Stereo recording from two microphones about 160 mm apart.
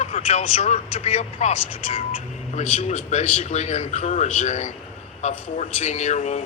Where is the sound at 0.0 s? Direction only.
45° left (ahead or behind).